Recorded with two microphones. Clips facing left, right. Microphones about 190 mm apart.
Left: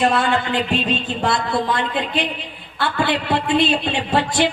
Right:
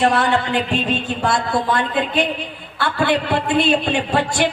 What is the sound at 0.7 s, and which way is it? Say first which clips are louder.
Speech: even; 50° right (ahead or behind).